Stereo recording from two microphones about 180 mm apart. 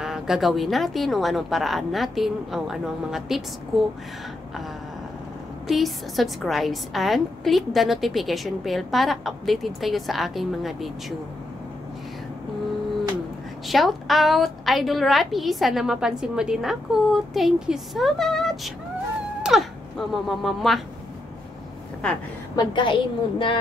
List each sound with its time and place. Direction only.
0.0 s a woman's voice: centre (ahead or behind)
5.7 s a woman's voice: centre (ahead or behind)
13.7 s a woman's voice: centre (ahead or behind)
22.0 s a woman's voice: 5° left (ahead or behind)
22.6 s a woman's voice: 25° left (ahead or behind)